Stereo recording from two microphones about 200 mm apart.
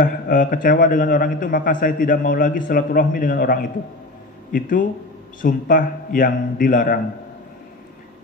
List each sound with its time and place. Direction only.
0.0 s a man's voice: 45° left (ahead or behind)